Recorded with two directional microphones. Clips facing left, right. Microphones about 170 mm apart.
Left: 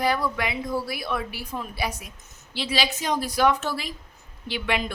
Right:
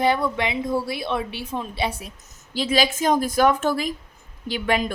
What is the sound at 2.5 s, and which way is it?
A woman's voice, 45° right (ahead or behind).